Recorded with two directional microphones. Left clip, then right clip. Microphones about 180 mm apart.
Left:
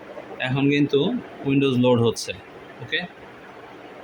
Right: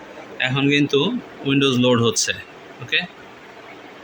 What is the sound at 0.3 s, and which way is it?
Speech, 5° left (ahead or behind).